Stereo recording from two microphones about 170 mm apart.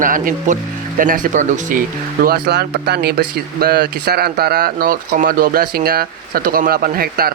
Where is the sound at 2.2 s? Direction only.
70° right (ahead or behind).